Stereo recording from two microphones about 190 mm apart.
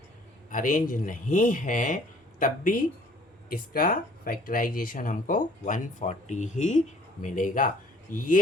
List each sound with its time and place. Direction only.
0.5 s speech: 45° left (ahead or behind)